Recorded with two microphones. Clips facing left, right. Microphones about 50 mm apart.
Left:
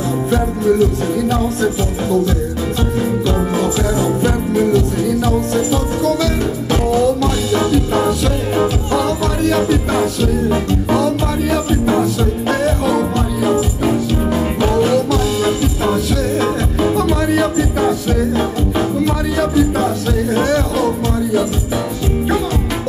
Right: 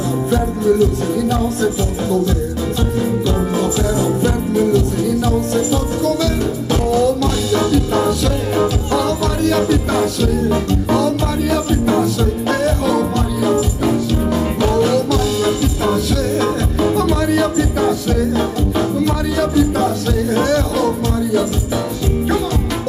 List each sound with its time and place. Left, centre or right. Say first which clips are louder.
0.3 s music: even; left
3.3 s music: left 1 dB; left
6.9 s music: even; left